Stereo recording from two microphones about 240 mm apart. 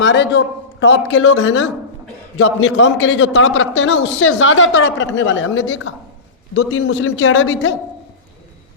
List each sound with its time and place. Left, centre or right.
0.0 s a man's voice: left